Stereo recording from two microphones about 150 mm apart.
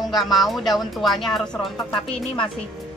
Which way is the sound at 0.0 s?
Centre (ahead or behind).